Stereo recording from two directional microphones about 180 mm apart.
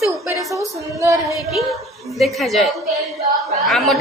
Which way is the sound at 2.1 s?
Centre (ahead or behind).